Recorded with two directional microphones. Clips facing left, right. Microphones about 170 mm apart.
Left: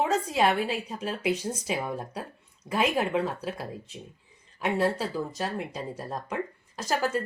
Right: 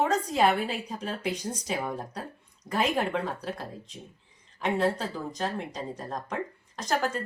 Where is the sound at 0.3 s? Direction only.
Centre (ahead or behind).